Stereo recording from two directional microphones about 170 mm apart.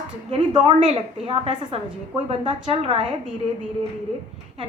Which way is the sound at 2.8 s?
35° right (ahead or behind).